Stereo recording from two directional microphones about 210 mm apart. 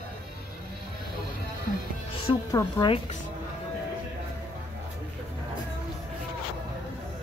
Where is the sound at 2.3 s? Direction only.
15° left (ahead or behind).